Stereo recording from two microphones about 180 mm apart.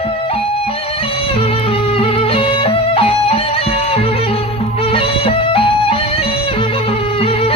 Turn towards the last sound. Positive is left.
turn(degrees=30)  # may be behind; listen again after turning